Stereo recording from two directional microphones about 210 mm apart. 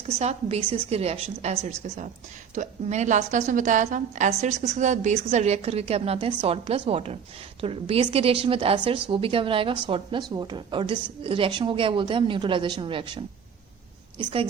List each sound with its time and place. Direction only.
0.2 s a woman's voice: 30° right (ahead or behind)
14.2 s a woman's voice: 20° right (ahead or behind)